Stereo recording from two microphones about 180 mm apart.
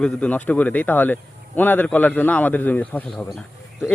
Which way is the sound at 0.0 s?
10° left (ahead or behind).